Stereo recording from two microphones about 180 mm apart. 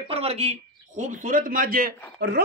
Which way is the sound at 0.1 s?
35° right (ahead or behind).